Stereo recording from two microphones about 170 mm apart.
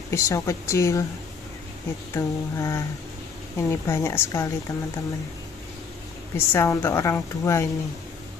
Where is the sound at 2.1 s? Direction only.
15° left (ahead or behind).